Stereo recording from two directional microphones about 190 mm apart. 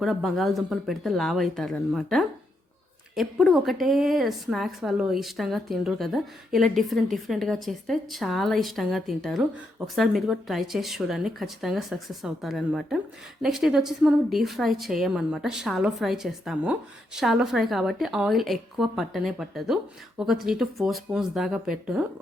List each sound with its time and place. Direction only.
0.0 s a woman's voice: centre (ahead or behind)